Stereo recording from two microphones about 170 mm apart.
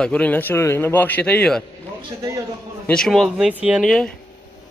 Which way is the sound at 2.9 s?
Centre (ahead or behind).